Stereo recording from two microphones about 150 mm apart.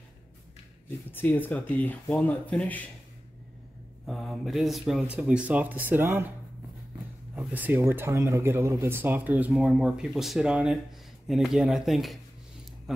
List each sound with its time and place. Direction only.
0.8 s speech: 15° left (ahead or behind)
4.0 s speech: centre (ahead or behind); by 6.2 s 15° right (ahead or behind)
7.3 s speech: 10° right (ahead or behind)